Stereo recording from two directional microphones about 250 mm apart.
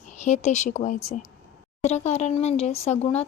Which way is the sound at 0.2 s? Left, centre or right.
Left.